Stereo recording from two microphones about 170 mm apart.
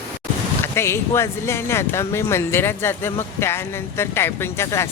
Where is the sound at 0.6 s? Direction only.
15° left (ahead or behind).